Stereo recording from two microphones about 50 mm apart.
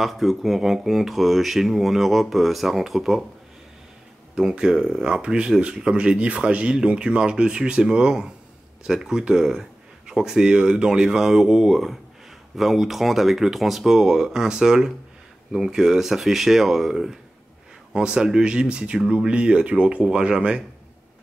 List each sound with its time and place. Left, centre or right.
0.0 s speech: centre
4.4 s speech: centre